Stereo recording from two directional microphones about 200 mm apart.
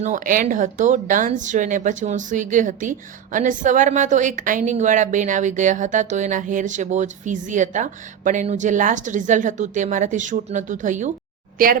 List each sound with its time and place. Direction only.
0.0 s a woman's voice: 40° right (ahead or behind)